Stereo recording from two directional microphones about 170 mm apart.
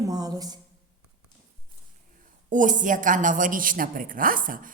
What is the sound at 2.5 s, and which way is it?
A woman's voice, 50° right (ahead or behind).